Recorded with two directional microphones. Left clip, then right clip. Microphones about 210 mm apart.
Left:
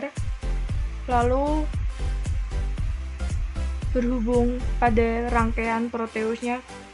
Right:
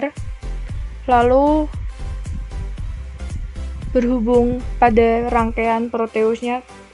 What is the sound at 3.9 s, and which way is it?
Speech, 40° right (ahead or behind).